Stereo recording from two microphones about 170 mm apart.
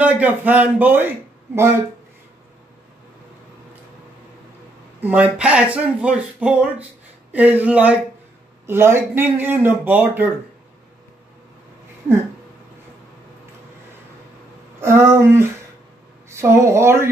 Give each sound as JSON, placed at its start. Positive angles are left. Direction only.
{"t": 0.0, "sound": "a man's voice", "side_deg": -10}
{"t": 5.0, "sound": "speech", "side_deg": -10}
{"t": 14.8, "sound": "speech", "side_deg": -15}